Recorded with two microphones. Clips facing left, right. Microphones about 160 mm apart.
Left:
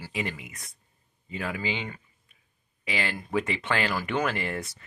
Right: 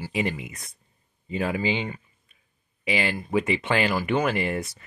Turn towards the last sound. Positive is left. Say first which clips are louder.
# right 4 dB
turn(degrees=-10)  # may be behind; listen again after turning